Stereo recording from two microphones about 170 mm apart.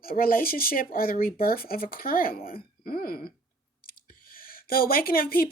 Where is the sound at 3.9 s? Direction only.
60° left (ahead or behind).